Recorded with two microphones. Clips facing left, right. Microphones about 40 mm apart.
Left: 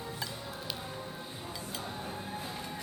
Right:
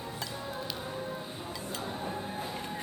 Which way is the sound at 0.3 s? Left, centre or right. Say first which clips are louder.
Right 3 dB; centre.